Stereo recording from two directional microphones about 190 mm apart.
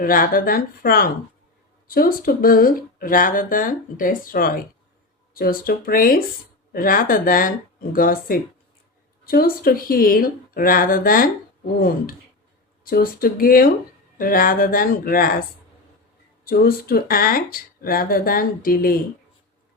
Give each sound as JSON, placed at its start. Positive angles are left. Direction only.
{"t": 0.0, "sound": "speech", "side_deg": 45}